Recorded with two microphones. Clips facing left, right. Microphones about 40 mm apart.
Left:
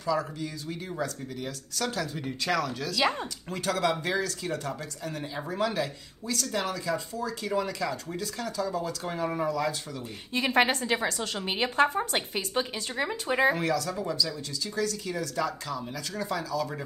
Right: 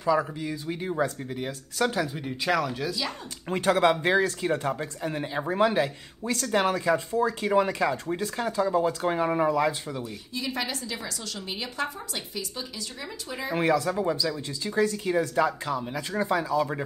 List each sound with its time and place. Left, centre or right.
0.0 s speech: right
2.1 s speech: centre
3.4 s speech: right
10.3 s a woman's voice: left
13.6 s speech: right